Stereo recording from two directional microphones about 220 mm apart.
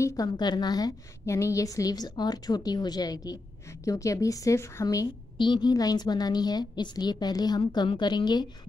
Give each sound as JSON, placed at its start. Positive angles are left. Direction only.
{"t": 0.0, "sound": "a woman's voice", "side_deg": 15}